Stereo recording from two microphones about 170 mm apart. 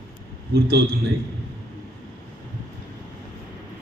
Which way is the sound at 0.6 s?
65° right (ahead or behind).